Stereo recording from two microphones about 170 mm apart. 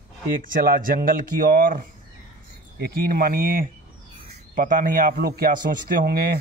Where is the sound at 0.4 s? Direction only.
55° right (ahead or behind).